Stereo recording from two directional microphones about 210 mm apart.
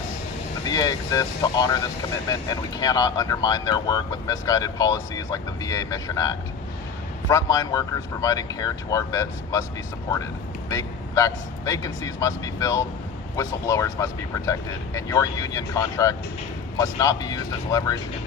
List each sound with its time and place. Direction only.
0.6 s speech: 20° left (ahead or behind)
10.7 s speech: 15° left (ahead or behind)